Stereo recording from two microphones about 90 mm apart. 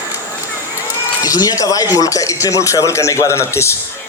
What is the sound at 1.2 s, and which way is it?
Speech, 45° left (ahead or behind).